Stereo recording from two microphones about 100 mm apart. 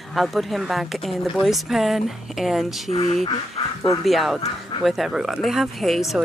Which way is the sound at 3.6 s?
90° left.